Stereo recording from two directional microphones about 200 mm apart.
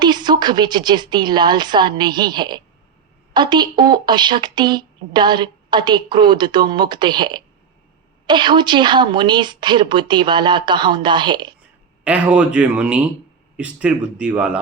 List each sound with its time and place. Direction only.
0.0 s speech: 20° right (ahead or behind)
12.0 s speech: 5° right (ahead or behind)